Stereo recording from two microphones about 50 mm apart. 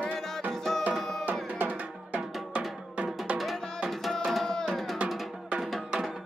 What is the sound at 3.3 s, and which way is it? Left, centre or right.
Music, right.